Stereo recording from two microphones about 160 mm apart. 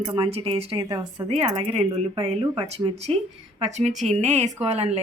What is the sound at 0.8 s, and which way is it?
Speech, 25° right (ahead or behind).